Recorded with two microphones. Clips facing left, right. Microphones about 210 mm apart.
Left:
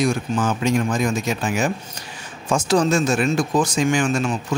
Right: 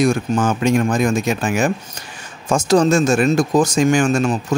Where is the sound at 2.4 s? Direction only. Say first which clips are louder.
Right 4 dB; 45° right (ahead or behind).